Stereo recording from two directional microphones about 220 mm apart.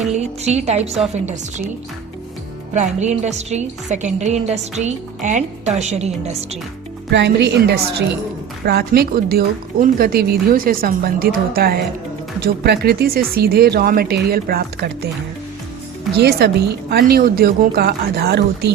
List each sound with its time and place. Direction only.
0.0 s a woman's voice: 30° right (ahead or behind)
2.7 s a woman's voice: 30° right (ahead or behind)
7.1 s speech: 50° right (ahead or behind)
16.1 s speech: 50° right (ahead or behind)